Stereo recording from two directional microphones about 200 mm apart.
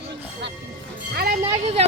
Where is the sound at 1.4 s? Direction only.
30° right (ahead or behind).